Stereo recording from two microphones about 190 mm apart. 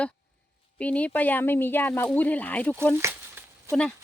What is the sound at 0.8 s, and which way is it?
Speech, 5° left (ahead or behind).